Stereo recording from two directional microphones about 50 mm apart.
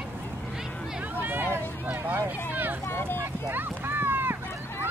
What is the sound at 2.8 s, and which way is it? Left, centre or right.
Vehicle, left.